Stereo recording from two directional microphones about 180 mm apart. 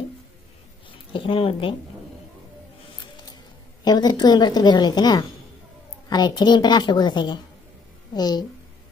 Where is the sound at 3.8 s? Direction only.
20° left (ahead or behind).